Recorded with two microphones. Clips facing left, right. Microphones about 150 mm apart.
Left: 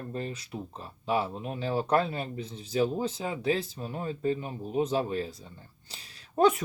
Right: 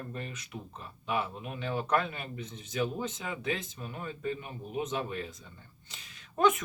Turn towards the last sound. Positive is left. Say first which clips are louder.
# left 3 dB
turn(degrees=35)  # may be behind; listen again after turning